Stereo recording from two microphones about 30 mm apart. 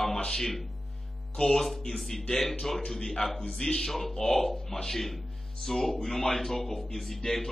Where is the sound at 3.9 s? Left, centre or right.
Centre.